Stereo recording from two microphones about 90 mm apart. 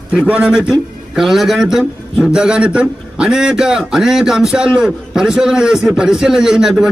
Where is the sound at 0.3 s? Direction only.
10° right (ahead or behind).